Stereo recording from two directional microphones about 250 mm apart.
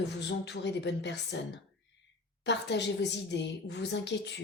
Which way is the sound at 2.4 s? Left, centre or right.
Left.